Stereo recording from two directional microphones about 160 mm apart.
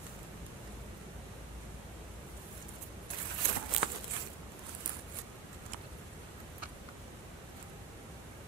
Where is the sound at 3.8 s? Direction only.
5° right (ahead or behind).